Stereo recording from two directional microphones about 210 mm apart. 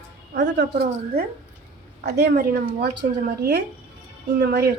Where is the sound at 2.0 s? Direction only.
50° right (ahead or behind).